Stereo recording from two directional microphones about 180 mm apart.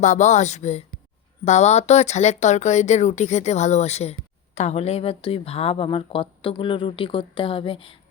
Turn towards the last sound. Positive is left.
turn(degrees=30)  # may be behind; listen again after turning